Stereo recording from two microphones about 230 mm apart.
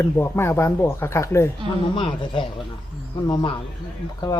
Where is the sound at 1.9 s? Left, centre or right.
Left.